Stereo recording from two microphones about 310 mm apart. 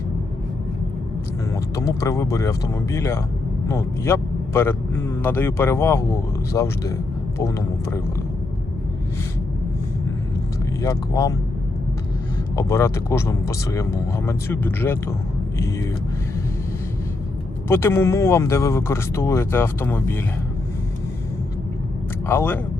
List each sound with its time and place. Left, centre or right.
1.5 s speech: centre
10.8 s speech: centre
12.5 s speech: centre
17.7 s speech: centre
22.3 s speech: centre